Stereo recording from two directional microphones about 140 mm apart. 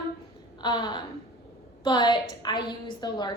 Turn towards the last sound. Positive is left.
turn(degrees=30)  # may be behind; listen again after turning